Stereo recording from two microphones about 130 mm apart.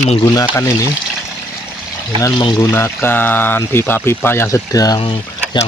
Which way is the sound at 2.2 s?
30° left (ahead or behind).